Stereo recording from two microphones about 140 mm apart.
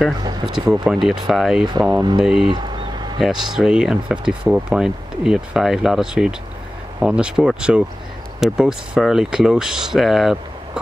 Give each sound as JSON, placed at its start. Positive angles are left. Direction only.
{"t": 0.7, "sound": "speech", "side_deg": -5}
{"t": 2.0, "sound": "speech", "side_deg": -30}
{"t": 2.2, "sound": "speech", "side_deg": -5}
{"t": 2.5, "sound": "a sound", "side_deg": -30}
{"t": 3.2, "sound": "speech", "side_deg": -5}